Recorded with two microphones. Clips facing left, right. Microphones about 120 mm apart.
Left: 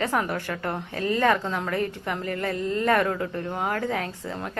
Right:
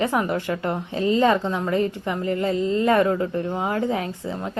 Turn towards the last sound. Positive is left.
turn(degrees=-15)  # may be behind; listen again after turning